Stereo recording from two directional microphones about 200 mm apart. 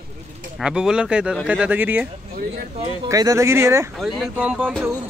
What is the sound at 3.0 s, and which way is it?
Speech, 15° right (ahead or behind).